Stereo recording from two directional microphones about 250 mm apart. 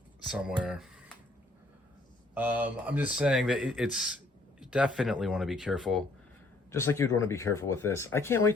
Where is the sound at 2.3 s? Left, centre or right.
Centre.